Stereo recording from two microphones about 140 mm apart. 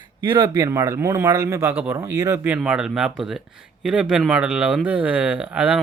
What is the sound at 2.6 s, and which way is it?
Speech, 5° right (ahead or behind).